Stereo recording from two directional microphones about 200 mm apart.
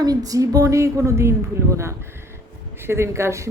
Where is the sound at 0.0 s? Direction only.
20° right (ahead or behind).